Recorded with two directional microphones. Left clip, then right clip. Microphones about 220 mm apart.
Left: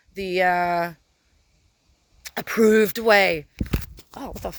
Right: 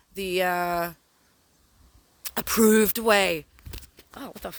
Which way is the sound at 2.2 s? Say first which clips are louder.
Left 3 dB; 30° right (ahead or behind).